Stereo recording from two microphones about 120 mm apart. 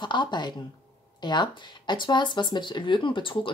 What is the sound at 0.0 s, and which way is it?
Speech, 40° left (ahead or behind).